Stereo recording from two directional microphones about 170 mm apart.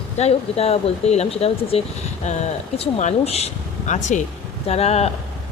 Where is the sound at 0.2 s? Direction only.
35° left (ahead or behind).